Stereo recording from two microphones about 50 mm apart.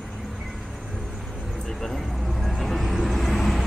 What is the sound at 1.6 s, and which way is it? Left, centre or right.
Vehicle, centre.